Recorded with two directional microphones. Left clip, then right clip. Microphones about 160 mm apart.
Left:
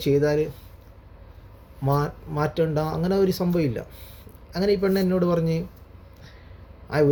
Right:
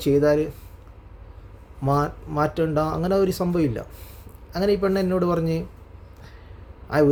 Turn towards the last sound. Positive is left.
turn(degrees=-15)  # may be behind; listen again after turning